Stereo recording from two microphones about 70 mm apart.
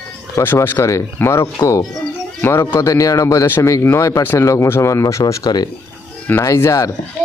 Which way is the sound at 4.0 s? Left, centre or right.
Left.